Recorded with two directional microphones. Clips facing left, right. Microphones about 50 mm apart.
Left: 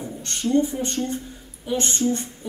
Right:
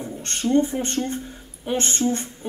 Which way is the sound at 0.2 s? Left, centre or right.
Right.